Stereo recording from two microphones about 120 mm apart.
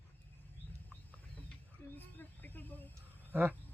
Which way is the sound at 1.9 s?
15° left (ahead or behind).